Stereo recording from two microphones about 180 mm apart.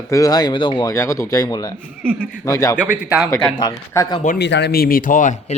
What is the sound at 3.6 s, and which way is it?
Speech, 20° left (ahead or behind).